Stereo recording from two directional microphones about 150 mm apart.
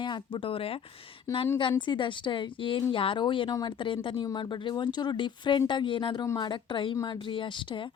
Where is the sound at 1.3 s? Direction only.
20° left (ahead or behind).